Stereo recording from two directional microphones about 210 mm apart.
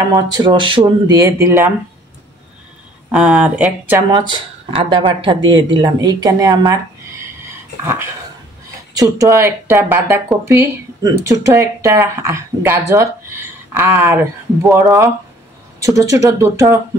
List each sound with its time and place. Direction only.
0.1 s speech: 20° right (ahead or behind)
3.1 s speech: 5° right (ahead or behind)
4.1 s speech: 20° right (ahead or behind)
7.8 s speech: 10° right (ahead or behind)